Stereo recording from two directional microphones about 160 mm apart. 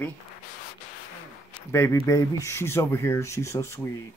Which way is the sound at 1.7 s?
15° left (ahead or behind).